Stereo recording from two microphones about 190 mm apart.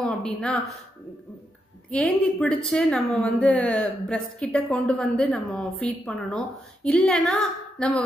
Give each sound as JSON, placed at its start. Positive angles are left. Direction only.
{"t": 0.0, "sound": "a woman's voice", "side_deg": 5}
{"t": 1.9, "sound": "a woman's voice", "side_deg": 5}